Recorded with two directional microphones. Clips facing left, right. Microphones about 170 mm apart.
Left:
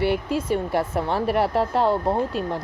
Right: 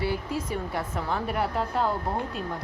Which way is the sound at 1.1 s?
70° left (ahead or behind).